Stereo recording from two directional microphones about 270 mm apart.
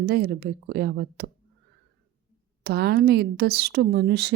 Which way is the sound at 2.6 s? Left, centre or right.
Right.